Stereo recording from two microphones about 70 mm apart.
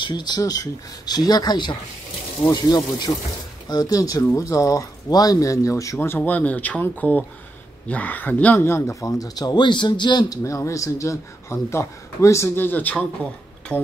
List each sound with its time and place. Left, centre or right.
0.0 s speech: left
0.4 s speech: left
1.0 s speech: left
3.6 s speech: left
5.9 s speech: left
8.5 s speech: left
9.0 s speech: left
10.4 s speech: left; by 13.8 s centre